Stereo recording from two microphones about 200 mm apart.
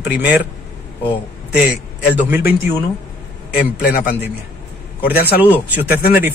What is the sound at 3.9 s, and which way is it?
Speech, 45° left (ahead or behind).